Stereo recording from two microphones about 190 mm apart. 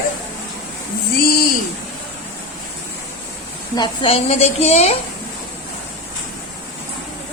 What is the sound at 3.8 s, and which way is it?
A woman's voice, 30° left (ahead or behind).